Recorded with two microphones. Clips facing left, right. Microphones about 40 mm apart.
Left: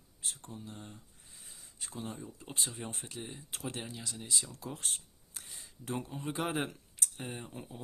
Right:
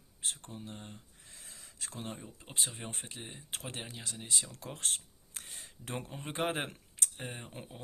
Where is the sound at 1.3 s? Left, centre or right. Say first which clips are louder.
Right 3 dB; right.